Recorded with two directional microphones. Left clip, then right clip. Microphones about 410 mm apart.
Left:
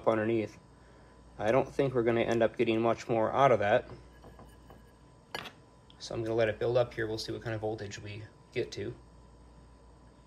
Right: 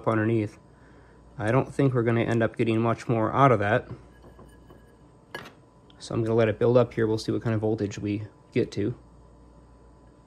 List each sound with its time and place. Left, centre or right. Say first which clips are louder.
1.3 s speech: right 2 dB; centre
5.3 s dishes: right 1 dB; centre
5.9 s speech: right 6 dB; centre